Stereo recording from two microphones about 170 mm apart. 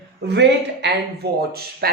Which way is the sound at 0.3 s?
90° right.